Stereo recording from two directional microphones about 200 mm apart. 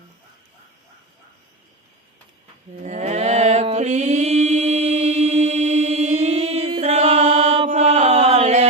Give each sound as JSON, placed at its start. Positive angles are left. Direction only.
{"t": 2.8, "sound": "mantra", "side_deg": -35}